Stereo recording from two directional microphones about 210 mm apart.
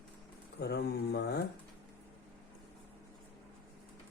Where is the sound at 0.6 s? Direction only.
50° left (ahead or behind).